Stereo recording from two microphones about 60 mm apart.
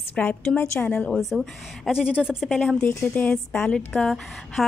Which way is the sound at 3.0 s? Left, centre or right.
Left.